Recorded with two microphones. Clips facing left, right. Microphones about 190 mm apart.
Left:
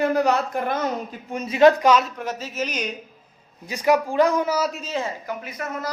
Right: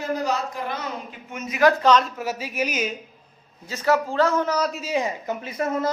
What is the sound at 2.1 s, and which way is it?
Speech, 10° right (ahead or behind).